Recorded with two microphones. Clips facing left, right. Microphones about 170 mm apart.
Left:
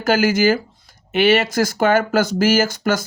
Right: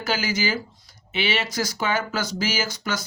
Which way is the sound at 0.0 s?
50° left (ahead or behind).